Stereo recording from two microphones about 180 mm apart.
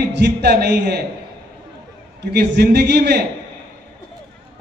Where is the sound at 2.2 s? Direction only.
65° right (ahead or behind).